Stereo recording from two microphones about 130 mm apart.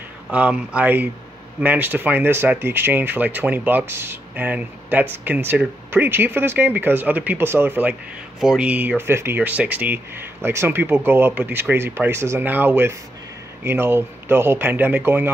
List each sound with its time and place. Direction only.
0.3 s speech: 10° right (ahead or behind)
8.4 s speech: 5° right (ahead or behind)